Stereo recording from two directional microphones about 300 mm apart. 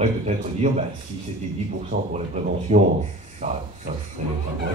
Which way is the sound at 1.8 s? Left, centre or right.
Right.